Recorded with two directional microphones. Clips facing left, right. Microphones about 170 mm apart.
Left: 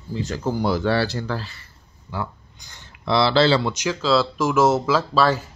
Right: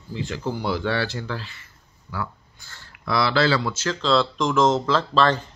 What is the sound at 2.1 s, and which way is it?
Speech, 25° left (ahead or behind).